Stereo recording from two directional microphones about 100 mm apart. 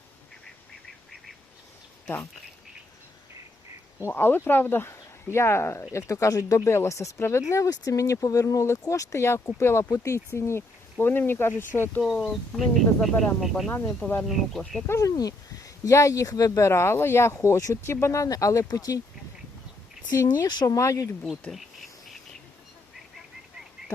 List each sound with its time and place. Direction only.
4.1 s speech: 20° left (ahead or behind)
12.0 s speech: centre (ahead or behind)
14.0 s speech: 15° left (ahead or behind)
14.3 s speech: centre (ahead or behind)
14.8 s speech: 30° left (ahead or behind)
20.2 s speech: 45° left (ahead or behind)
21.5 s insect: centre (ahead or behind)